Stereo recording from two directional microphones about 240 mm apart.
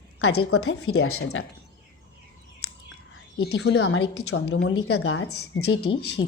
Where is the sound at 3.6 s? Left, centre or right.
Left.